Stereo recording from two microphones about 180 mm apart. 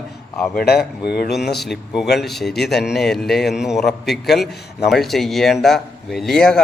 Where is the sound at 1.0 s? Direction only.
65° left (ahead or behind).